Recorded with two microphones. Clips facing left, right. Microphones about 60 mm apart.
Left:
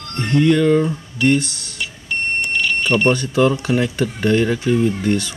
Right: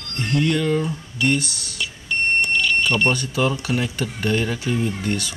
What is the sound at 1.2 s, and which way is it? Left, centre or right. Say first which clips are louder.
Speech: left 5 dB; left.